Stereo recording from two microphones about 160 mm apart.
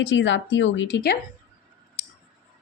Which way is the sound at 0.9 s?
85° left.